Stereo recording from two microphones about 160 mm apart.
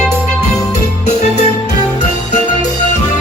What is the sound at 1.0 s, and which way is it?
Music, 45° left (ahead or behind).